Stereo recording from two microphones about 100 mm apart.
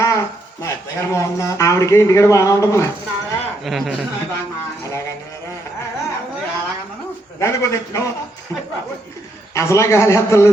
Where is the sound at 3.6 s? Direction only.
Centre (ahead or behind).